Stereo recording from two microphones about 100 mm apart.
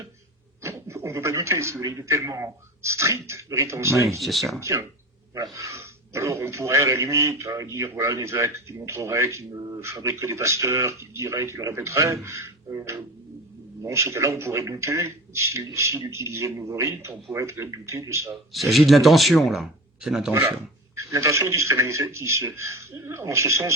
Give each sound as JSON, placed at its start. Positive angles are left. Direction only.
{"t": 0.6, "sound": "a man's voice", "side_deg": -30}
{"t": 4.2, "sound": "speech", "side_deg": 0}
{"t": 4.6, "sound": "a man's voice", "side_deg": -30}
{"t": 18.5, "sound": "speech", "side_deg": 0}
{"t": 20.4, "sound": "a sound", "side_deg": -20}
{"t": 21.0, "sound": "a man's voice", "side_deg": -30}